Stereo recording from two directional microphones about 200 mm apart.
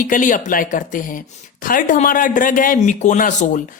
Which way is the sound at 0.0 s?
40° left (ahead or behind).